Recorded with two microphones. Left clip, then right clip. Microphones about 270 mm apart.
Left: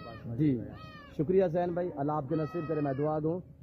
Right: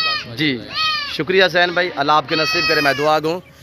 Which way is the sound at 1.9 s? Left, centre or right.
Centre.